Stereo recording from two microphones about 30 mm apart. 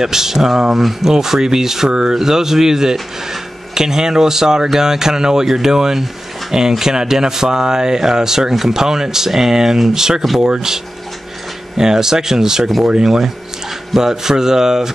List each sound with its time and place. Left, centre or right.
0.0 s speech: centre
1.1 s speech: centre
11.7 s speech: centre